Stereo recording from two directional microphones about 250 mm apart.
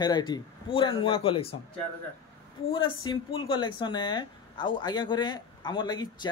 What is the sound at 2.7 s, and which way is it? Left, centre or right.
Speech, centre.